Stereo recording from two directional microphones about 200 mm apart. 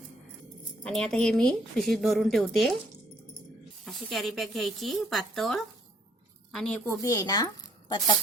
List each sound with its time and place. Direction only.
0.9 s a woman's voice: 5° left (ahead or behind)
3.8 s a woman's voice: centre (ahead or behind); by 8.1 s 20° left (ahead or behind)